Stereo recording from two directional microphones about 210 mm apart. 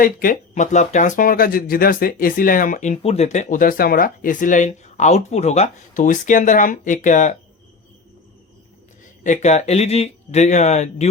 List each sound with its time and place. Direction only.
0.0 s speech: 40° left (ahead or behind)
9.2 s speech: 35° left (ahead or behind)